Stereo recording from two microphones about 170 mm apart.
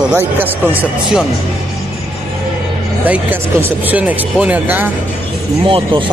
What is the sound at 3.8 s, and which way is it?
Speech, 10° right (ahead or behind).